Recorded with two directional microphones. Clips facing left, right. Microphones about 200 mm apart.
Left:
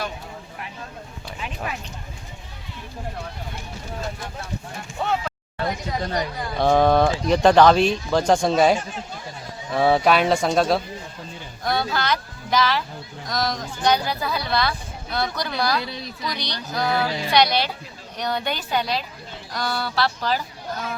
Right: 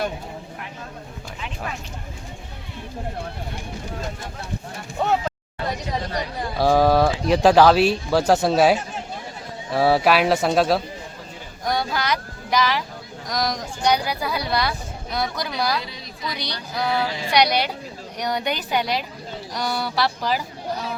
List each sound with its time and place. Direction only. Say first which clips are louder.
5.0 s a sound: right 3 dB; 40° right (ahead or behind)
6.6 s speech: even; 5° right (ahead or behind)
11.6 s speech: even; 15° right (ahead or behind)